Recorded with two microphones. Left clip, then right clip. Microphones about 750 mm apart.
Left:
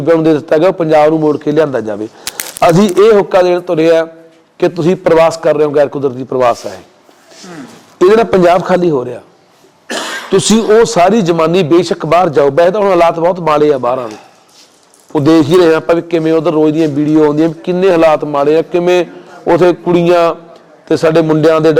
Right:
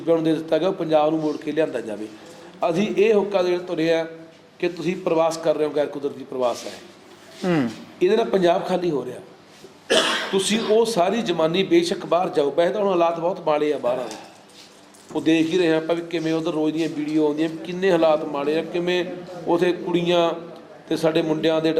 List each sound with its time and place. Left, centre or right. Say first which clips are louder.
0.3 s a man's voice: left 12 dB; left
7.9 s a man's voice: left 12 dB; left
10.3 s a man's voice: left 13 dB; left
15.1 s a man's voice: left 12 dB; left